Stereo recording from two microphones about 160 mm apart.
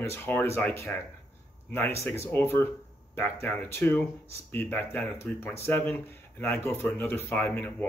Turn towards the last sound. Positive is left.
turn(degrees=10)  # may be behind; listen again after turning